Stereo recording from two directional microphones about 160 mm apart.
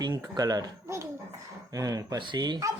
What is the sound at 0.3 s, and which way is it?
A child's voice, 25° right (ahead or behind).